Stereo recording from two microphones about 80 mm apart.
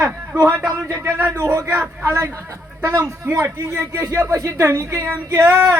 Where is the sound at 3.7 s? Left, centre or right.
Right.